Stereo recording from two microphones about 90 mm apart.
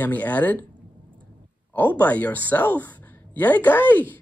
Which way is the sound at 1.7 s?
20° left (ahead or behind).